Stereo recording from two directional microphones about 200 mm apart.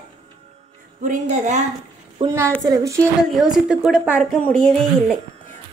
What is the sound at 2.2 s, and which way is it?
Speech, 25° right (ahead or behind).